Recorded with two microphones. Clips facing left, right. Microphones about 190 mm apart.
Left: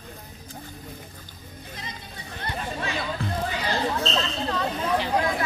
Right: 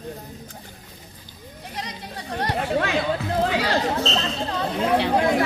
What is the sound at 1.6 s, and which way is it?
Chatter, 75° right (ahead or behind).